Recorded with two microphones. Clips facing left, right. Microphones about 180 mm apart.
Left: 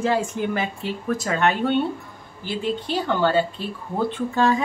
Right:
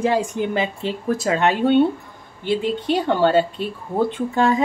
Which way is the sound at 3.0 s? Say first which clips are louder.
Right 3 dB; 25° right (ahead or behind).